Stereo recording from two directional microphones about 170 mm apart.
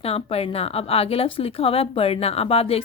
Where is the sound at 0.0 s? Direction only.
35° left (ahead or behind).